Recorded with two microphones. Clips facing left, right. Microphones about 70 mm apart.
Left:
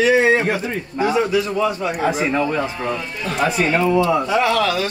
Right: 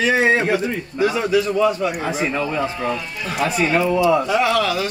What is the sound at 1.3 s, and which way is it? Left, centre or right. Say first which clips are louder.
Speech: right 2 dB; centre.